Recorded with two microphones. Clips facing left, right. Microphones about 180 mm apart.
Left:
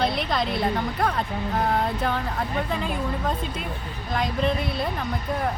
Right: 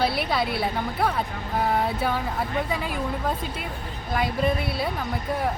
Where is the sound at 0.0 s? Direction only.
5° right (ahead or behind).